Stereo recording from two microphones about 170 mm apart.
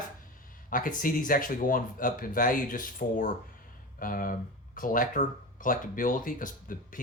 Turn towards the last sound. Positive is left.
turn(degrees=50)  # may be behind; listen again after turning